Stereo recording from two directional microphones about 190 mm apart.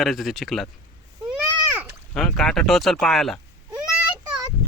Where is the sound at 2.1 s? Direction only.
Centre (ahead or behind).